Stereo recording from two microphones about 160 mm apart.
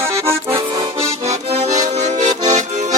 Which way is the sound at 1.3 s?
45° right (ahead or behind).